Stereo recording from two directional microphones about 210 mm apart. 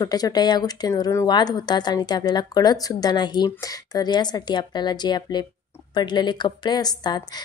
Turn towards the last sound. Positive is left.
turn(degrees=20)  # may be behind; listen again after turning